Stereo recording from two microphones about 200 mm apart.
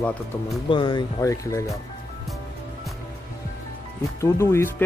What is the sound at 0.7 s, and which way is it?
Speech, 25° left (ahead or behind).